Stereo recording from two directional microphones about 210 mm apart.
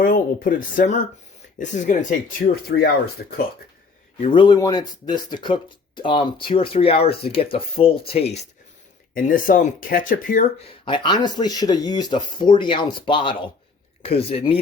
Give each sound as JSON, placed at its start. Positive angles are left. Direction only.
{"t": 0.0, "sound": "speech", "side_deg": 40}
{"t": 4.2, "sound": "speech", "side_deg": 20}
{"t": 9.1, "sound": "speech", "side_deg": 40}
{"t": 10.8, "sound": "speech", "side_deg": 20}